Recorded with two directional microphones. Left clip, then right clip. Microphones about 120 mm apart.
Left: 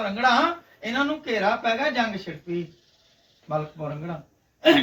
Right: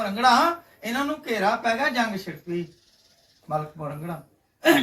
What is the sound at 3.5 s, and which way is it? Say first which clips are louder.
Speech: left 1 dB; 5° right (ahead or behind).